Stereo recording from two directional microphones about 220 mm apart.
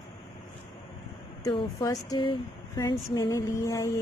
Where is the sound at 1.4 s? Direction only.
15° left (ahead or behind).